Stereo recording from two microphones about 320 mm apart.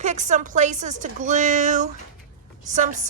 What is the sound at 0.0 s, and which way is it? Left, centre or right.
A woman's voice, right.